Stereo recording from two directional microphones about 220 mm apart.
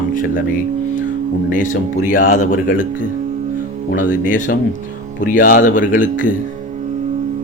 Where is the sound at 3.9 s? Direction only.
35° left (ahead or behind).